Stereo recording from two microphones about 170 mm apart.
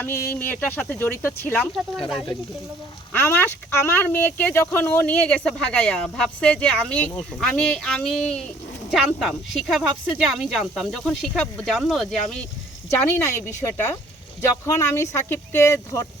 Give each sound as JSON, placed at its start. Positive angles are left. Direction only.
{"t": 0.0, "sound": "speech", "side_deg": 15}
{"t": 3.1, "sound": "speech", "side_deg": 15}
{"t": 12.9, "sound": "speech", "side_deg": 15}